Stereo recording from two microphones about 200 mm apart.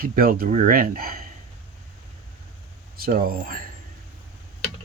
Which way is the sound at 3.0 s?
50° right (ahead or behind).